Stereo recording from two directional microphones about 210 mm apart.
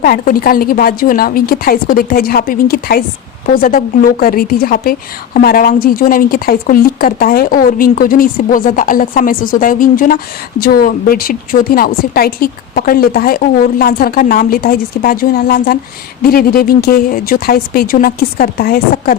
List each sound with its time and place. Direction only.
0.0 s a woman's voice: 45° left (ahead or behind)